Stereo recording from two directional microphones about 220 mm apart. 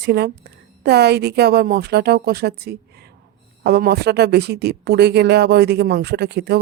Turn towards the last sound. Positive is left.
turn(degrees=-50)  # may be behind; listen again after turning